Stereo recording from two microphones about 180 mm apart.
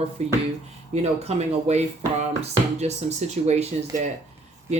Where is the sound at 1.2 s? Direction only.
35° right (ahead or behind).